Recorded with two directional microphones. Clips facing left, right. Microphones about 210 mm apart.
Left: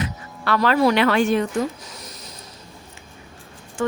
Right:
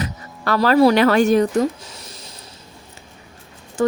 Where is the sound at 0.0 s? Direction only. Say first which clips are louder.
Right 2 dB; 40° right (ahead or behind).